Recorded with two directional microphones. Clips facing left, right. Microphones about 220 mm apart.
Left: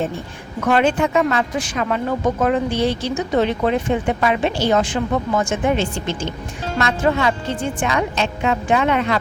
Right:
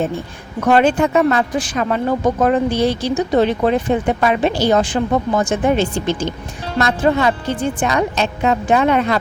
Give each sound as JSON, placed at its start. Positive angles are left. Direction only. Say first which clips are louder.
{"t": 0.7, "sound": "speech", "louder": "right 3 dB", "side_deg": -40}